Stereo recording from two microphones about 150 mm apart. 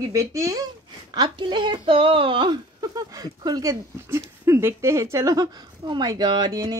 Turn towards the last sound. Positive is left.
turn(degrees=-25)  # may be behind; listen again after turning